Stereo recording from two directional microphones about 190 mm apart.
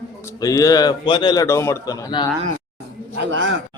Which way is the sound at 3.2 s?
75° right (ahead or behind).